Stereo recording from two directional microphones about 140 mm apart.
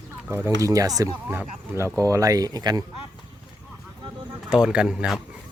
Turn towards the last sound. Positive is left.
turn(degrees=-5)  # may be behind; listen again after turning